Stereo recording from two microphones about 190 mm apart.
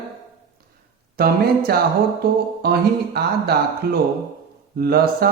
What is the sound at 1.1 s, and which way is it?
Mantra, 55° right (ahead or behind).